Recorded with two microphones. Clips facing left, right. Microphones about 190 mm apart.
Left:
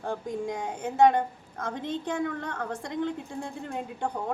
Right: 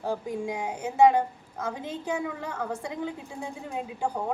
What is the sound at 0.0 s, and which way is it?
A woman's voice, 5° right (ahead or behind).